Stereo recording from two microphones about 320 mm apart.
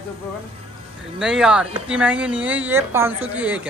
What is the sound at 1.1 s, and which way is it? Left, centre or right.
Speech, centre.